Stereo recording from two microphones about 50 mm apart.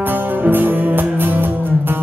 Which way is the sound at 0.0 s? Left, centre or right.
Right.